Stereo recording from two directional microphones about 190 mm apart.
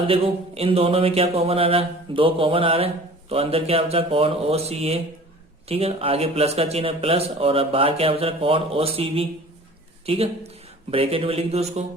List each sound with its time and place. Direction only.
0.1 s speech: 30° right (ahead or behind)
10.9 s speech: 30° right (ahead or behind)